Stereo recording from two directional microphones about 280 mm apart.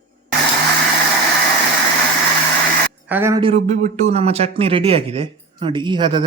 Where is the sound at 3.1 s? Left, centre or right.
Centre.